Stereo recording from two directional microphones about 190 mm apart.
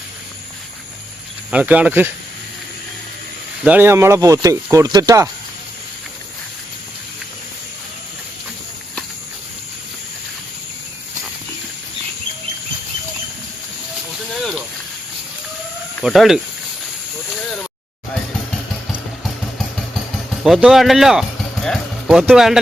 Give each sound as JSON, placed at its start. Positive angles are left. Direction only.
{"t": 1.5, "sound": "speech", "side_deg": -5}
{"t": 3.6, "sound": "speech", "side_deg": -10}
{"t": 14.3, "sound": "snake", "side_deg": 0}
{"t": 16.0, "sound": "speech", "side_deg": 0}
{"t": 20.4, "sound": "speech", "side_deg": 0}